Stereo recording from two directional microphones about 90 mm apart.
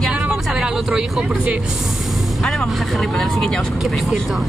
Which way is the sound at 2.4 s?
5° left (ahead or behind).